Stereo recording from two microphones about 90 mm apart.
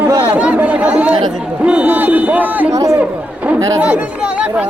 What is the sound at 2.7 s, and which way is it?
Speech, 35° right (ahead or behind).